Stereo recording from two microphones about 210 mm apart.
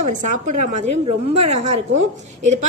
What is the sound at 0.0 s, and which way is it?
A woman's voice, 35° right (ahead or behind).